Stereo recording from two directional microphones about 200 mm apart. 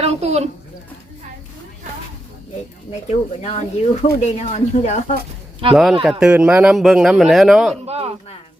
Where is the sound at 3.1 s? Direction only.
35° left (ahead or behind).